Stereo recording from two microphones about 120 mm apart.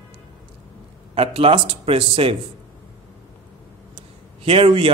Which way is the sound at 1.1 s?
55° right (ahead or behind).